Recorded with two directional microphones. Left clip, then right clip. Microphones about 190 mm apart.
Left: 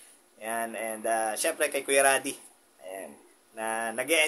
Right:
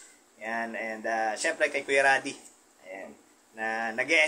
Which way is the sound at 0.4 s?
25° left (ahead or behind).